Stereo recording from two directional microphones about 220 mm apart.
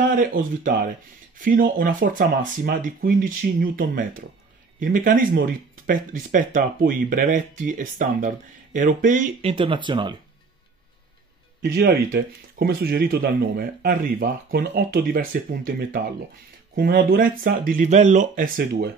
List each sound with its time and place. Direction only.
0.1 s speech: 40° right (ahead or behind)
1.4 s speech: 40° right (ahead or behind); by 10.1 s 20° right (ahead or behind)
11.6 s speech: 45° right (ahead or behind)